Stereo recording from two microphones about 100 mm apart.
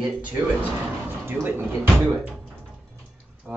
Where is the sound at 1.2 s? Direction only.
20° right (ahead or behind).